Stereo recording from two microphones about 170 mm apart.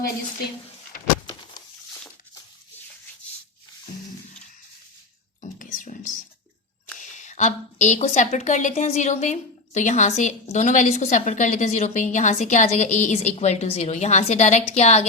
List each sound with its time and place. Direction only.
5.4 s whispering: 50° left (ahead or behind)
7.0 s a woman's voice: 45° left (ahead or behind)